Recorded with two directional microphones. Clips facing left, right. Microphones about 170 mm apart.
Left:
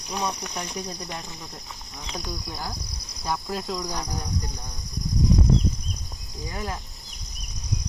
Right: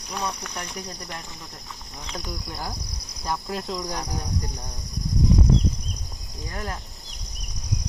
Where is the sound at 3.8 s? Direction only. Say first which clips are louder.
Right 1 dB; 10° right (ahead or behind).